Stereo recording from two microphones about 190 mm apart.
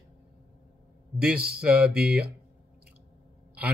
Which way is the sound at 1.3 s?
55° right (ahead or behind).